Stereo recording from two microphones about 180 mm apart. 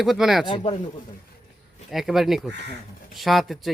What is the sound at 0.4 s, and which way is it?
Speech, 30° left (ahead or behind).